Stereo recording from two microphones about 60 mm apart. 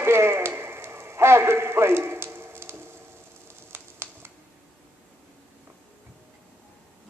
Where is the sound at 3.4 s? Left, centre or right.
Right.